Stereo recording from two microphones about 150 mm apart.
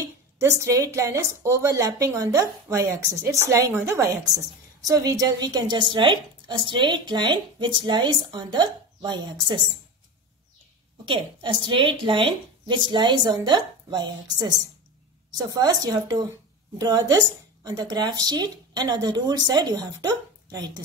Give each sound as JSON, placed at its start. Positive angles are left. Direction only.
{"t": 0.0, "sound": "a woman's voice", "side_deg": -20}
{"t": 11.1, "sound": "a woman's voice", "side_deg": -35}